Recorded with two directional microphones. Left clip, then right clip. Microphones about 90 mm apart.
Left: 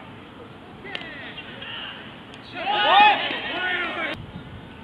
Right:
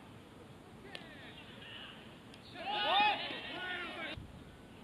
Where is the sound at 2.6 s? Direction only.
40° right (ahead or behind).